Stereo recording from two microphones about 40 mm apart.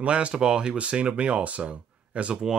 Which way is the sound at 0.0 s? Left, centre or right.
Right.